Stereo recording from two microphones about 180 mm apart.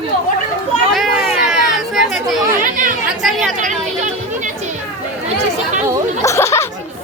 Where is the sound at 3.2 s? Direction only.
Centre (ahead or behind).